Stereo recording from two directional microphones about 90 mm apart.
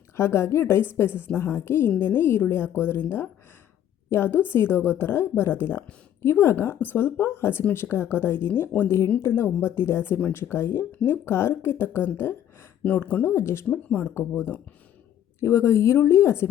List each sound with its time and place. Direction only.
0.2 s a woman's voice: 30° left (ahead or behind)
13.7 s speech: 15° left (ahead or behind)
14.1 s a woman's voice: 30° left (ahead or behind)